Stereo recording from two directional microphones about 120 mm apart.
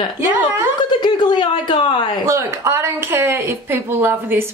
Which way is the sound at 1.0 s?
40° left (ahead or behind).